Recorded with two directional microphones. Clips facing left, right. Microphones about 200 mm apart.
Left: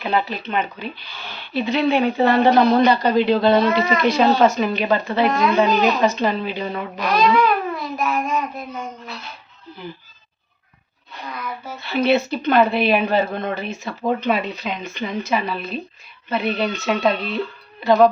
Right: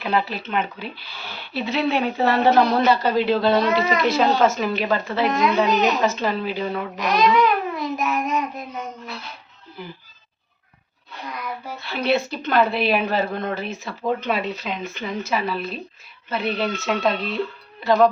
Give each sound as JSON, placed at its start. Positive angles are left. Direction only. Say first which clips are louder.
{"t": 0.0, "sound": "speech", "louder": "left 1 dB", "side_deg": 0}
{"t": 6.9, "sound": "speech", "louder": "left 2 dB", "side_deg": -20}
{"t": 7.3, "sound": "babbling", "louder": "left 1 dB", "side_deg": -15}
{"t": 11.8, "sound": "speech", "louder": "left 4 dB", "side_deg": 0}